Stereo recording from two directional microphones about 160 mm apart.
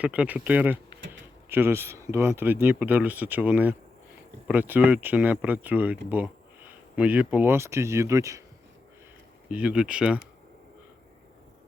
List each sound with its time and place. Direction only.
0.0 s speech: 10° right (ahead or behind)
9.5 s speech: 10° right (ahead or behind)